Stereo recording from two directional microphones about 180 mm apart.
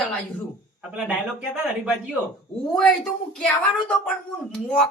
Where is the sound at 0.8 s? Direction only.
5° right (ahead or behind).